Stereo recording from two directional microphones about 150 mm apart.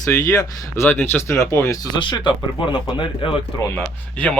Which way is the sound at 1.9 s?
30° left (ahead or behind).